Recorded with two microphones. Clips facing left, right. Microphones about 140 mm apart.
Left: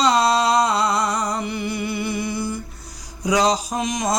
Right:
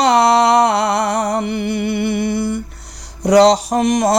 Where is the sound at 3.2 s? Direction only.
70° right (ahead or behind).